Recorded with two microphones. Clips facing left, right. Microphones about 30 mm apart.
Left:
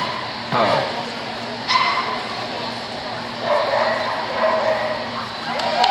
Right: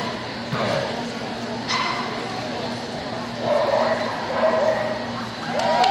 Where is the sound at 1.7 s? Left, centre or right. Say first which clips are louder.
Left 6 dB; left.